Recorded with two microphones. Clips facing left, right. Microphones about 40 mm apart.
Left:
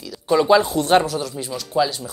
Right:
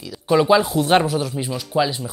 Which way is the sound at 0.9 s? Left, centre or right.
Centre.